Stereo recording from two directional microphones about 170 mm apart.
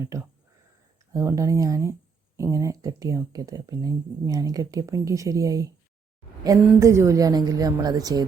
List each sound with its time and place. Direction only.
0.0 s speech: 15° right (ahead or behind)
6.7 s speech: 15° right (ahead or behind)